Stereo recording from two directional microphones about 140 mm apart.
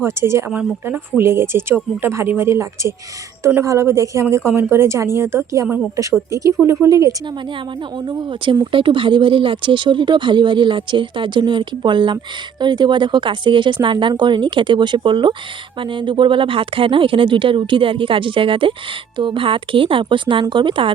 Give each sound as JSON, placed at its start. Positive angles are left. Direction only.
{"t": 0.0, "sound": "a woman's voice", "side_deg": -20}
{"t": 6.8, "sound": "a woman's voice", "side_deg": -25}
{"t": 8.0, "sound": "speech", "side_deg": -35}